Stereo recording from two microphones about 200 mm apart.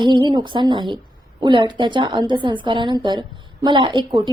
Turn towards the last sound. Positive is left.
turn(degrees=-25)  # may be behind; listen again after turning